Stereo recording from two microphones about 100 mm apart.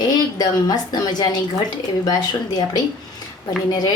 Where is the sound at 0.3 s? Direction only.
40° left (ahead or behind).